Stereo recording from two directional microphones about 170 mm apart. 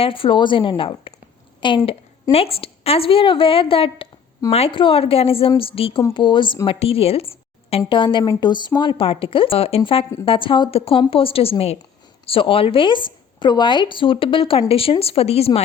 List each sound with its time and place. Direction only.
0.0 s a woman's voice: 30° left (ahead or behind)